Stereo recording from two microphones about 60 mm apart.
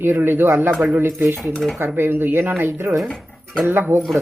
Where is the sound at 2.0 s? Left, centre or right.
Right.